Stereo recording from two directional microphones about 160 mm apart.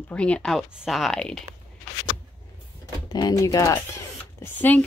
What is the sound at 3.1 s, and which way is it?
Speech, 25° left (ahead or behind).